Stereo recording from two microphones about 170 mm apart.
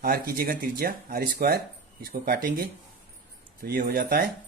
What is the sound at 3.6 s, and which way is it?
Speech, 60° right (ahead or behind).